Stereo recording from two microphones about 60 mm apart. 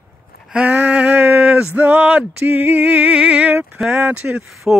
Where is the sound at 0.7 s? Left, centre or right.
Right.